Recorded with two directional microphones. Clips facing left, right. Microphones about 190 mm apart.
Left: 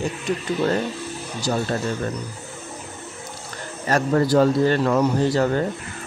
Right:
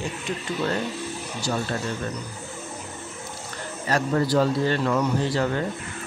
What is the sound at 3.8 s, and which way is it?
A man's voice, 45° left (ahead or behind).